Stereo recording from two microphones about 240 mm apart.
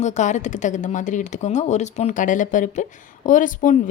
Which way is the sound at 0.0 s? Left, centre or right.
Left.